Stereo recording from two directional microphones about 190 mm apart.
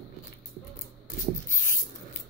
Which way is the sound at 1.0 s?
45° left (ahead or behind).